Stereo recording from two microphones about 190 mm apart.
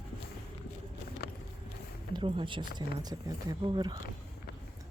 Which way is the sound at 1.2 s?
55° left (ahead or behind).